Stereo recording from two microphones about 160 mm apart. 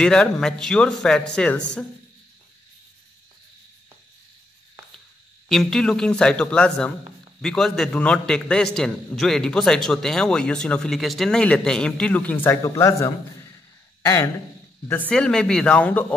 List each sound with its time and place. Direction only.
0.0 s a man's voice: 5° left (ahead or behind)
5.5 s a man's voice: centre (ahead or behind)